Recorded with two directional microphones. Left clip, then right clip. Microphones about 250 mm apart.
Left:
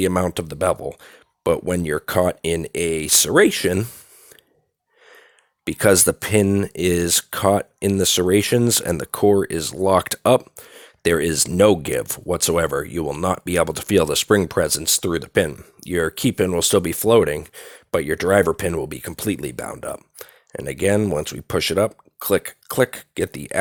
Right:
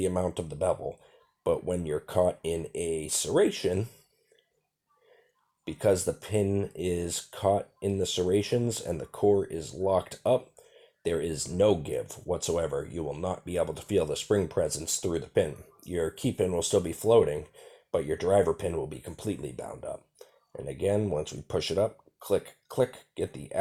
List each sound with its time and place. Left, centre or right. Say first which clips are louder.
0.0 s speech: left 9 dB; left
5.6 s speech: left 10 dB; left